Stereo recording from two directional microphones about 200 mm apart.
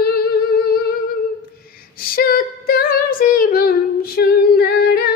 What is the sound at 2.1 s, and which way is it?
Female singing, 45° left (ahead or behind).